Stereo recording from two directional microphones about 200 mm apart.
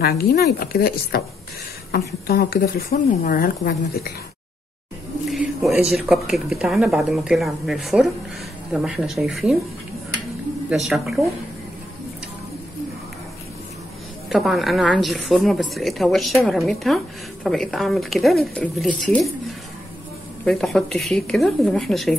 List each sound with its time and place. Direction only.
0.0 s speech: 50° left (ahead or behind)
5.3 s a woman's voice: centre (ahead or behind)
10.7 s a woman's voice: centre (ahead or behind)
14.3 s a woman's voice: centre (ahead or behind)
20.4 s a woman's voice: centre (ahead or behind)